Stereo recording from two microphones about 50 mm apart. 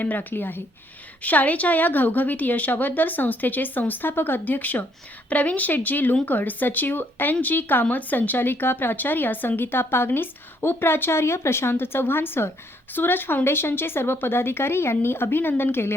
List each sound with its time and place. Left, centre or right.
0.0 s a woman's voice: left